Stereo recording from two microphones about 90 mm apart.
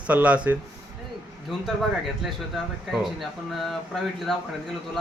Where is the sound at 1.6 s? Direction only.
Centre (ahead or behind).